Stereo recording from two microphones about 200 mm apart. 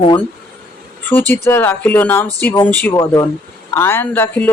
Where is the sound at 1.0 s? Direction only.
10° left (ahead or behind).